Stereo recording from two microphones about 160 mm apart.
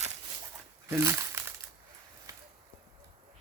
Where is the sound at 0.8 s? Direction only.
20° right (ahead or behind).